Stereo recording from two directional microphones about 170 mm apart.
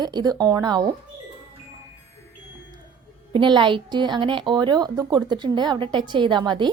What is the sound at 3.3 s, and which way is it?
Speech, 30° right (ahead or behind).